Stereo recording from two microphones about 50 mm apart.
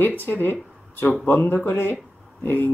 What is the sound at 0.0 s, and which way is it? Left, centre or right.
Speech, left.